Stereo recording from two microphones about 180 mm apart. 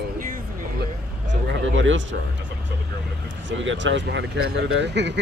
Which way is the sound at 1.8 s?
90° right.